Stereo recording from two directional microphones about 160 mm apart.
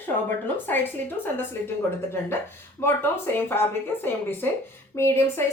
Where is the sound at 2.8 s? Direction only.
15° left (ahead or behind).